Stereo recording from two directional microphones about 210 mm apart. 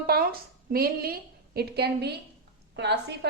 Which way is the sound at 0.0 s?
45° right (ahead or behind).